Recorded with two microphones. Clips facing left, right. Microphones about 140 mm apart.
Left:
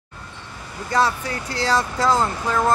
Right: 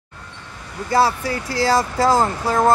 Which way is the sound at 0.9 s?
35° right (ahead or behind).